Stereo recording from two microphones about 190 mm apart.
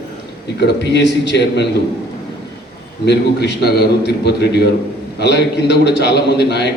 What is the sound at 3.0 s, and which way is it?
A man's voice, 60° left (ahead or behind).